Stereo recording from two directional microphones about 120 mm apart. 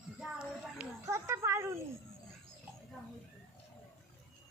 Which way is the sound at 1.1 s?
25° right (ahead or behind).